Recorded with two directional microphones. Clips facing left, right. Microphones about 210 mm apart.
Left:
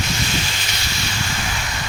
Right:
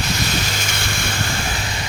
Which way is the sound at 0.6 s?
55° right (ahead or behind).